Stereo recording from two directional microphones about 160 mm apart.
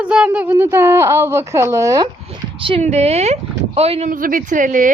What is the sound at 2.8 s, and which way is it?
A woman's voice, 45° right (ahead or behind).